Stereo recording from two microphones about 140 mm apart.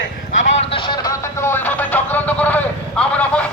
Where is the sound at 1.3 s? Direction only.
15° left (ahead or behind).